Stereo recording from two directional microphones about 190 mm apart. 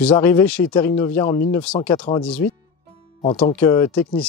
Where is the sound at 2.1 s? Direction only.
35° left (ahead or behind).